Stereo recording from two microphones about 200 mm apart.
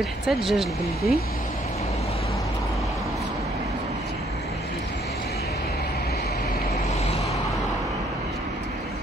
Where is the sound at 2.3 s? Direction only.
15° left (ahead or behind).